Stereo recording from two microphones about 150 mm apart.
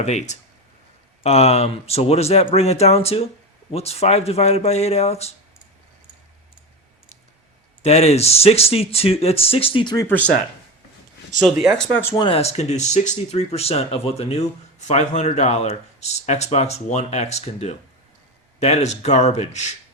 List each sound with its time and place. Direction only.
0.0 s speech: 50° left (ahead or behind)
7.8 s speech: 45° left (ahead or behind)
10.1 s speech: 10° left (ahead or behind)
11.3 s speech: centre (ahead or behind)
12.3 s speech: 45° left (ahead or behind)